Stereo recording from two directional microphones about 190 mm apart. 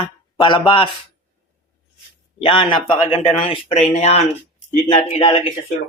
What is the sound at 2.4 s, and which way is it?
Speech, 25° left (ahead or behind).